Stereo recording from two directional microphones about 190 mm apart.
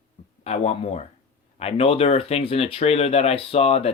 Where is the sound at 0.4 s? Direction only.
35° left (ahead or behind).